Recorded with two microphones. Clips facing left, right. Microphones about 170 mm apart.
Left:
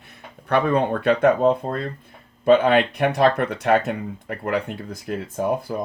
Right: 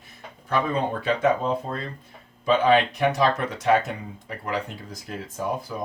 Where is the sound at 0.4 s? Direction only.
65° left (ahead or behind).